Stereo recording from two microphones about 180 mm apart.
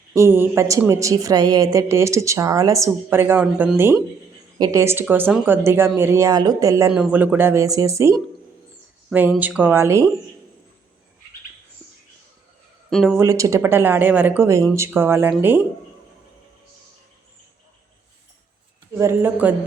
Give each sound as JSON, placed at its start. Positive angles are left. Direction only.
{"t": 0.1, "sound": "a woman's voice", "side_deg": -15}
{"t": 6.9, "sound": "a woman's voice", "side_deg": -5}
{"t": 12.9, "sound": "speech", "side_deg": 0}
{"t": 13.1, "sound": "a woman's voice", "side_deg": -15}
{"t": 18.9, "sound": "a woman's voice", "side_deg": -15}